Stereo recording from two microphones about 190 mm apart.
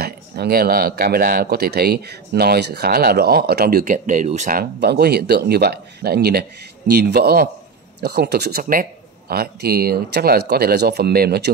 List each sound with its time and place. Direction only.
0.0 s speech: 55° right (ahead or behind)
4.7 s speech: 55° right (ahead or behind)